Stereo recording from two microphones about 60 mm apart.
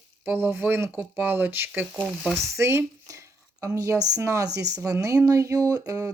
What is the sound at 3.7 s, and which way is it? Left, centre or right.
Speech, right.